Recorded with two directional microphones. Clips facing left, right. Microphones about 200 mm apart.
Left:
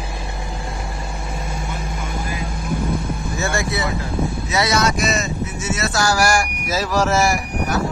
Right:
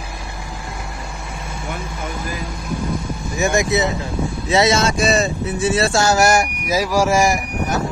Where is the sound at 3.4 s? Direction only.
20° right (ahead or behind).